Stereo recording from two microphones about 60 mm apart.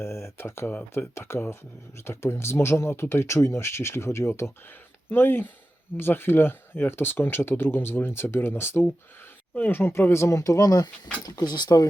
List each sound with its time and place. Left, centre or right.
0.0 s a sound: left
0.9 s speech: left
10.1 s speech: left
11.3 s speech: left